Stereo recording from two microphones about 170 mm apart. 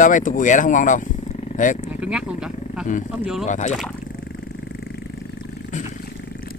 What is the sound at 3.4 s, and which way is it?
Speech, 45° left (ahead or behind).